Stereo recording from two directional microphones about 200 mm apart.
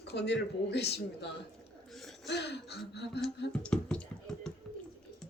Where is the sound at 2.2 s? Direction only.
55° left (ahead or behind).